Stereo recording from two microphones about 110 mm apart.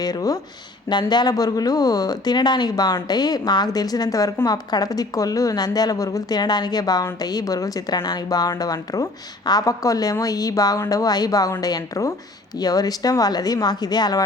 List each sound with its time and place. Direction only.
0.0 s a woman's voice: 35° left (ahead or behind)